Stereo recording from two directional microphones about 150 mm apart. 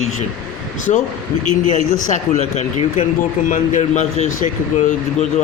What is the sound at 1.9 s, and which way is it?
Speech, 55° left (ahead or behind).